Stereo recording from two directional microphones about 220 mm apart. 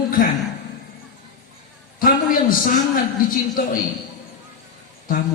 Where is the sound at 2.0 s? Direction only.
40° left (ahead or behind).